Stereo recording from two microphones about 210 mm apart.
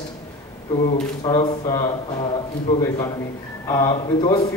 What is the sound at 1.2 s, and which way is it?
Speech, 20° left (ahead or behind).